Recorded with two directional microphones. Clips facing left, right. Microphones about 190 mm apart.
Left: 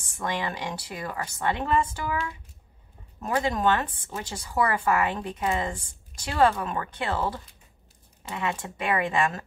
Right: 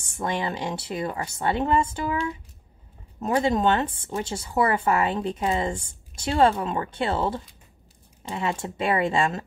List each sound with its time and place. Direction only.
0.0 s speech: 25° right (ahead or behind)